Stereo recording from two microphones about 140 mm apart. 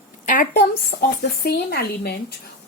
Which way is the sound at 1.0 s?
90° left.